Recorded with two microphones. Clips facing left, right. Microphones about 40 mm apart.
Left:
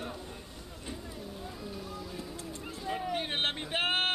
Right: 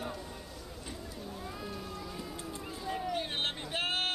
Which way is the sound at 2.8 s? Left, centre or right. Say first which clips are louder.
Left 2 dB; centre.